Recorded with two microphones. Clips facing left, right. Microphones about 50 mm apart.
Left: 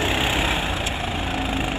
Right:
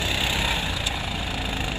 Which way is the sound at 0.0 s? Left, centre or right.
Left.